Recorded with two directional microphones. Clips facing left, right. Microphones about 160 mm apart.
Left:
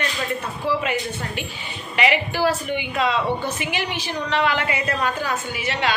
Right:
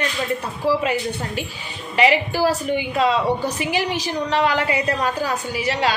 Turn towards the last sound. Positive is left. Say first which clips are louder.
# right 3 dB
turn(degrees=-35)  # may be behind; listen again after turning